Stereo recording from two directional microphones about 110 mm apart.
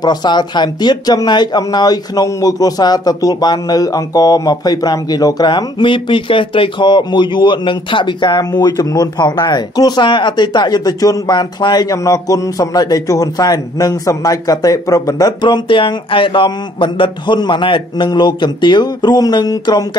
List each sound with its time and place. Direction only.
0.0 s speech: 40° left (ahead or behind)